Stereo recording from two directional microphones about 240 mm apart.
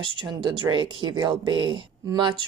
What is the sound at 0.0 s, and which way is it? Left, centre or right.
A woman's voice, right.